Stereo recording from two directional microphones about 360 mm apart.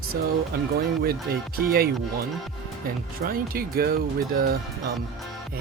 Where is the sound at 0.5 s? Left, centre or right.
Right.